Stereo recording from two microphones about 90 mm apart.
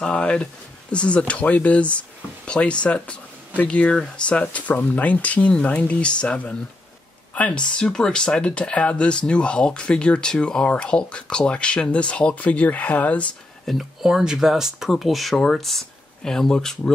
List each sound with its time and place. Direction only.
0.0 s speech: 10° left (ahead or behind)
13.7 s speech: 5° right (ahead or behind)